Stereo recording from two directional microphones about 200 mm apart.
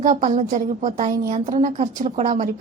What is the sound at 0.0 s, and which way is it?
A woman's voice, 40° right (ahead or behind).